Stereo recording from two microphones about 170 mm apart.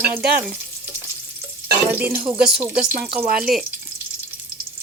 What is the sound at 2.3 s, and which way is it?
Frying, 5° right (ahead or behind).